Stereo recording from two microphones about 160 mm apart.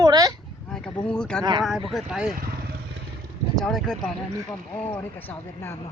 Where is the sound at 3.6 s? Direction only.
Centre (ahead or behind).